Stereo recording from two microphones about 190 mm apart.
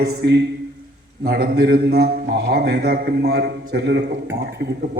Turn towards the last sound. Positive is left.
turn(degrees=-60)  # may be behind; listen again after turning